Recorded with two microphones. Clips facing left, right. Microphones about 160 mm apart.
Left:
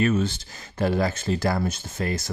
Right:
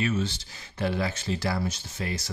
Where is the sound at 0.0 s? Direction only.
50° left (ahead or behind).